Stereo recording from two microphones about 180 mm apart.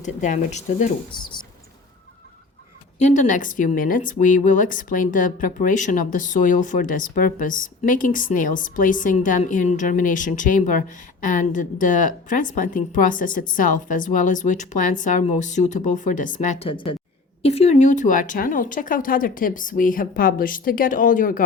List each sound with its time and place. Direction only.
0.0 s speech: 45° left (ahead or behind)
3.0 s speech: 45° left (ahead or behind)
16.6 s speech: 30° left (ahead or behind); by 21.4 s 50° left (ahead or behind)